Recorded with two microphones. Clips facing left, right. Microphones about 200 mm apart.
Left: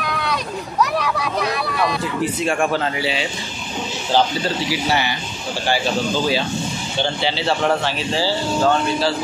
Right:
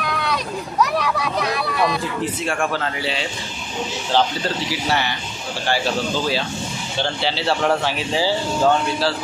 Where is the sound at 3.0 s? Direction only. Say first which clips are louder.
Left 2 dB; 5° left (ahead or behind).